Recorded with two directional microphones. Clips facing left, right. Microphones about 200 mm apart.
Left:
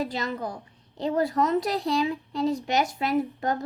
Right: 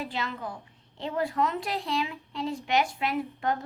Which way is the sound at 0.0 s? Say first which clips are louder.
Left 5 dB; 40° left (ahead or behind).